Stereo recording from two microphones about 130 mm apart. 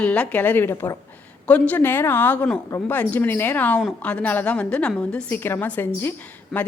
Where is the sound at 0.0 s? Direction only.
10° left (ahead or behind).